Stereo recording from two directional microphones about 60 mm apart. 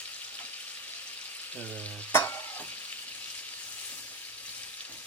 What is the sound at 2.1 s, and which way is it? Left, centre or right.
Stir, left.